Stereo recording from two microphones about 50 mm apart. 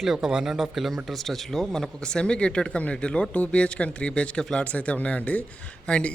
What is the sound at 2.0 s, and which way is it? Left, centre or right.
Speech, centre.